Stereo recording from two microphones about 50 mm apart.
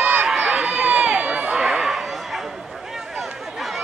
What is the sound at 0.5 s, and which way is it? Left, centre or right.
Crowd, right.